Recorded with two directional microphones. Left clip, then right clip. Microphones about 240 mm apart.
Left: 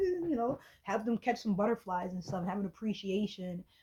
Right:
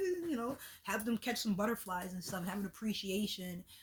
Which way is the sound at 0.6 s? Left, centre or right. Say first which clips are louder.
Left 4 dB; right.